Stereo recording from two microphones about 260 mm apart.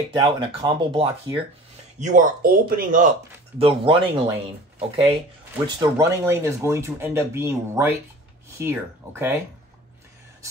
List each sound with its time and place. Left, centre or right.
0.1 s speech: centre